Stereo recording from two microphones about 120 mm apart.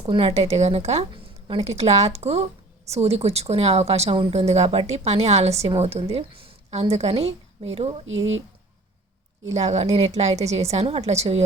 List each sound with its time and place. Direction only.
0.0 s a woman's voice: 50° right (ahead or behind)
1.1 s a woman's voice: 50° right (ahead or behind)
9.5 s a woman's voice: 65° right (ahead or behind)